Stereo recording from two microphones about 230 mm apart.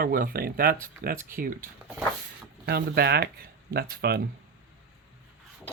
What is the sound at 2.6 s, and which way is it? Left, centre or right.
Speech, right.